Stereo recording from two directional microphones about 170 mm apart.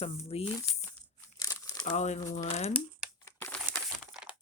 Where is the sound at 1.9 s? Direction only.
40° left (ahead or behind).